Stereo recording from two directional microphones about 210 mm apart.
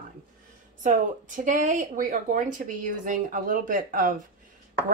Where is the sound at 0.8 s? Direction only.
40° right (ahead or behind).